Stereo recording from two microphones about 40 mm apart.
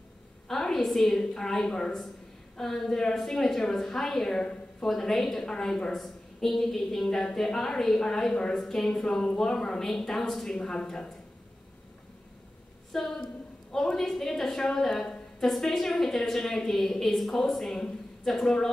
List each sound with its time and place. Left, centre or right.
0.5 s a sound: centre
0.8 s a woman's voice: centre
1.2 s a woman's voice: left
4.4 s a sound: left
4.8 s a woman's voice: centre
5.9 s a woman's voice: centre
10.6 s a woman's voice: left
12.9 s a woman's voice: centre